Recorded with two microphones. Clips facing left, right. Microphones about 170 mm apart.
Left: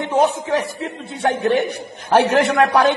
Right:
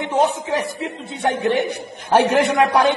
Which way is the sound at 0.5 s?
15° right (ahead or behind).